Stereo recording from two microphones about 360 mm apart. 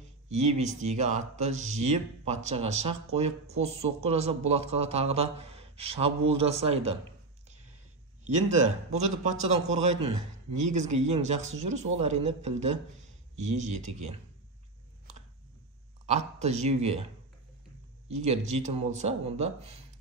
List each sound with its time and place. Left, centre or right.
0.3 s speech: centre
8.4 s speech: centre
16.1 s speech: centre
18.2 s speech: centre